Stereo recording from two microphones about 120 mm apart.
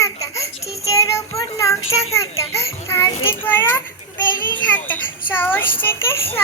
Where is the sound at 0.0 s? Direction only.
25° left (ahead or behind).